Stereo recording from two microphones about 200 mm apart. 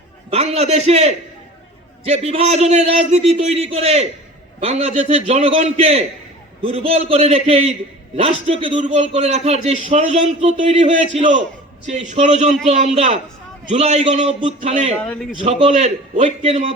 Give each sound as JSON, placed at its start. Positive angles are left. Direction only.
{"t": 0.3, "sound": "a man's voice", "side_deg": -30}
{"t": 8.8, "sound": "a man's voice", "side_deg": -40}
{"t": 14.9, "sound": "a man's voice", "side_deg": 5}
{"t": 15.4, "sound": "a man's voice", "side_deg": -35}